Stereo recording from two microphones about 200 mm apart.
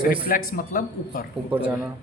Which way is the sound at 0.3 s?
45° left (ahead or behind).